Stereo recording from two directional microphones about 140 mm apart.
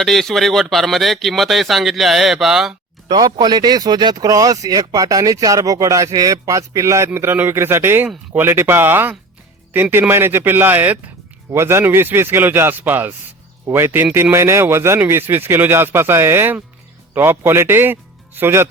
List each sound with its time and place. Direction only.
0.0 s speech: centre (ahead or behind)
3.1 s speech: 30° right (ahead or behind)